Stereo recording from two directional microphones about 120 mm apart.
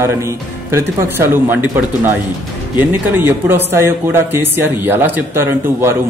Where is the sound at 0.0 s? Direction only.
20° right (ahead or behind).